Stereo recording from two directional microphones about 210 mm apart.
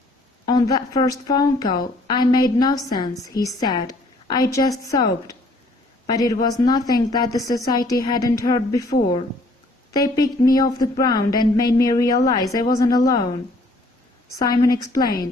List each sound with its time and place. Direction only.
0.4 s a woman's voice: 20° left (ahead or behind)
14.3 s a woman's voice: 15° left (ahead or behind)